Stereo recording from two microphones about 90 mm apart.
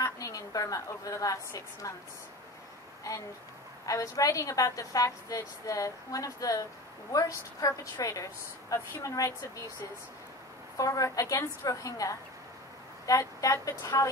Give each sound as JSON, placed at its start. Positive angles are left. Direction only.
{"t": 0.0, "sound": "a woman's voice", "side_deg": 40}
{"t": 3.1, "sound": "a woman's voice", "side_deg": 35}
{"t": 10.8, "sound": "a woman's voice", "side_deg": 40}